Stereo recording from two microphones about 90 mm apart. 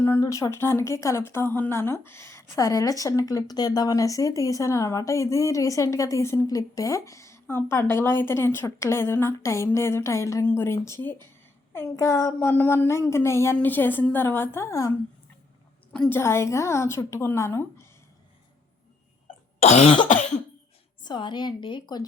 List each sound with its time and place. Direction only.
0.0 s speech: 30° left (ahead or behind)
2.6 s speech: 40° left (ahead or behind)
16.0 s speech: 25° left (ahead or behind)
21.0 s a woman's voice: 60° left (ahead or behind)